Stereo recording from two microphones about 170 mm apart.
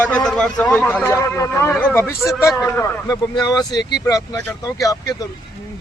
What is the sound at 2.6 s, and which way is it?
Speech, 10° left (ahead or behind).